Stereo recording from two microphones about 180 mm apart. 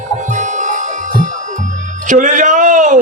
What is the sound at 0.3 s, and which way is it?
Music, 45° right (ahead or behind).